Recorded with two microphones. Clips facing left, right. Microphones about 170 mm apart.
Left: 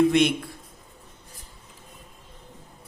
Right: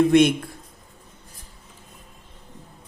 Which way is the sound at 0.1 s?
50° right (ahead or behind).